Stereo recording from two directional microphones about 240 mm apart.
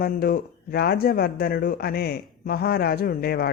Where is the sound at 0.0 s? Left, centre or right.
Left.